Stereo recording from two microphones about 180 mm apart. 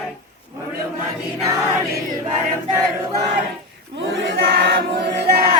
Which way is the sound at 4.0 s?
90° right.